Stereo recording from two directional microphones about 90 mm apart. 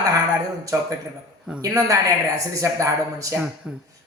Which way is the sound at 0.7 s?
30° right (ahead or behind).